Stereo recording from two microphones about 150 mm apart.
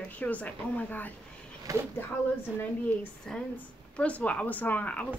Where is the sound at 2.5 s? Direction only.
10° left (ahead or behind).